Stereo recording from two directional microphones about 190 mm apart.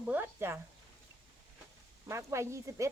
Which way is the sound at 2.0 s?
15° right (ahead or behind).